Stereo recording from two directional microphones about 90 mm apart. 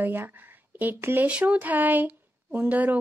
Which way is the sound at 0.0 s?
25° right (ahead or behind).